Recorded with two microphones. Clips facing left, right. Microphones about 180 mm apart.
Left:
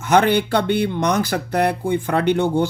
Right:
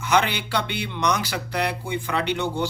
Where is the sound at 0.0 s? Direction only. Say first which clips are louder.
Left 7 dB; 50° left (ahead or behind).